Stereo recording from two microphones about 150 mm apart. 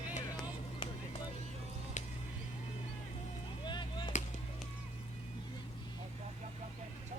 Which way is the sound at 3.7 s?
30° left (ahead or behind).